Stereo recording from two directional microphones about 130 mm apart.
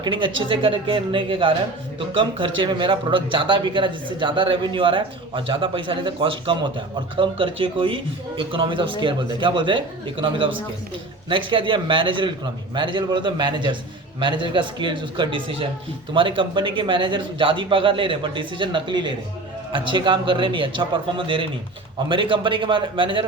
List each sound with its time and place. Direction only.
0.0 s a man's voice: 40° right (ahead or behind)